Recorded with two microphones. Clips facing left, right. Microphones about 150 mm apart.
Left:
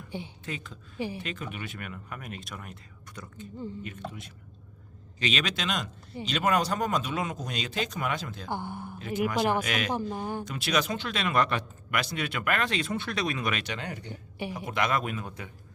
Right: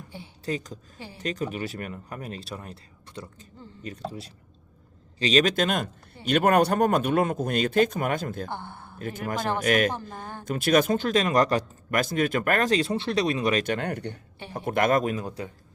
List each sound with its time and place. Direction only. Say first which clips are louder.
0.4 s speech: right 8 dB; 40° right (ahead or behind)
0.9 s speech: left 15 dB; 15° left (ahead or behind)
1.2 s speech: right 7 dB; 40° right (ahead or behind)
8.4 s speech: left 3 dB; 10° left (ahead or behind)
9.0 s speech: left 2 dB; 50° right (ahead or behind)
9.4 s speech: left 1 dB; 15° left (ahead or behind)
9.6 s speech: right 9 dB; 50° right (ahead or behind)
10.1 s speech: left 6 dB; 15° left (ahead or behind)
10.4 s speech: right 10 dB; 50° right (ahead or behind)
13.7 s speech: right 8 dB; 55° right (ahead or behind); by 15.4 s 35° right (ahead or behind)